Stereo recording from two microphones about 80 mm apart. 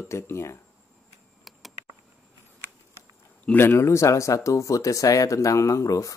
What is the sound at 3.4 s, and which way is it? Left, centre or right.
Speech, left.